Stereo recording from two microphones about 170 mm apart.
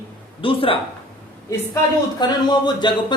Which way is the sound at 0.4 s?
30° left (ahead or behind).